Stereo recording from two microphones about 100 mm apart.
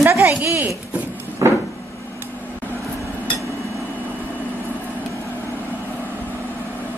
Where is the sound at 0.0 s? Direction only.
20° right (ahead or behind).